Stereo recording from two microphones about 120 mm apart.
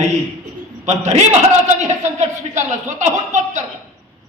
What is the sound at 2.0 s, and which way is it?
Speech, 80° right.